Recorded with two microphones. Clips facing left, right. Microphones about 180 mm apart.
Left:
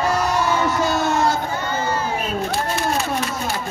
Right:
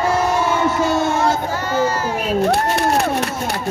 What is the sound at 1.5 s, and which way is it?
Speech, 85° right.